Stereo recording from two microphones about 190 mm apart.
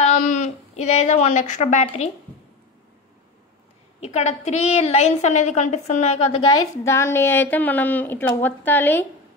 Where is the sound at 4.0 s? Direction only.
35° left (ahead or behind).